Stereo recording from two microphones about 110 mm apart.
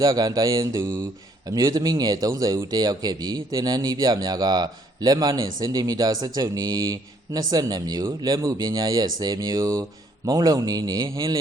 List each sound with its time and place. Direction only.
0.0 s speech: 35° right (ahead or behind)